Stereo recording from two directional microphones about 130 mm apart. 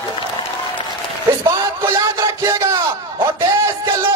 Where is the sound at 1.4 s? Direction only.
25° right (ahead or behind).